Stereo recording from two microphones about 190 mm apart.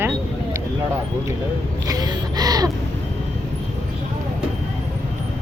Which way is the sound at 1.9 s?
20° right (ahead or behind).